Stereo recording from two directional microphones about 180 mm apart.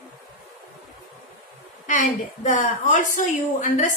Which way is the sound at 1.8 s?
45° left (ahead or behind).